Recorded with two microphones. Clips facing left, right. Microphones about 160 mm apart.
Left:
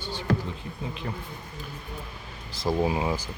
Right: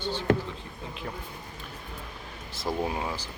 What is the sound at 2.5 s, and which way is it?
Speech, centre (ahead or behind).